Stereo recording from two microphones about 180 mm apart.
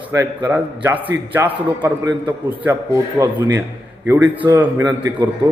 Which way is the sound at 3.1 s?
15° right (ahead or behind).